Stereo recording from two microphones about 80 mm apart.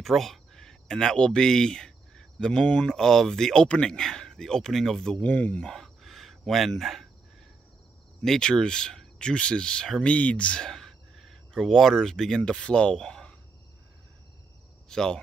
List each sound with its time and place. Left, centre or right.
0.0 s speech: centre
5.3 s speech: centre
5.7 s a sound: centre
8.2 s speech: centre
14.9 s speech: centre